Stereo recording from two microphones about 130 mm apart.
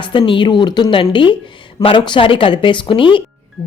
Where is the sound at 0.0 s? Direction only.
40° left (ahead or behind).